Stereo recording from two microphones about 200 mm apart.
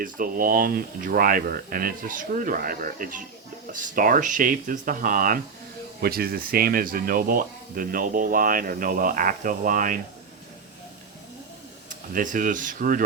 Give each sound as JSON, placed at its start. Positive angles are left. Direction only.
{"t": 0.0, "sound": "speech", "side_deg": -45}
{"t": 11.9, "sound": "speech", "side_deg": -40}